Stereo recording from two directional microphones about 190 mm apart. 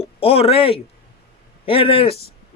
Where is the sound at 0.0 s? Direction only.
30° left (ahead or behind).